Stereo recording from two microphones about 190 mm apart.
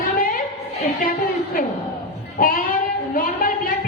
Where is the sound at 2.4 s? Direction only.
50° left (ahead or behind).